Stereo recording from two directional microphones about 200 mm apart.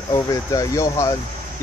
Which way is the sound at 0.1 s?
15° left (ahead or behind).